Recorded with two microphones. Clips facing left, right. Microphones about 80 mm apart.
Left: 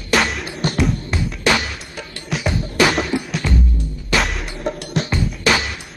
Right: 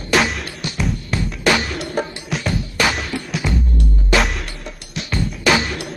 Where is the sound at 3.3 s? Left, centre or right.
Centre.